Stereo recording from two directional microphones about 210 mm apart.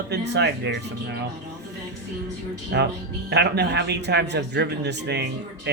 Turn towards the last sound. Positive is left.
turn(degrees=-55)  # may be behind; listen again after turning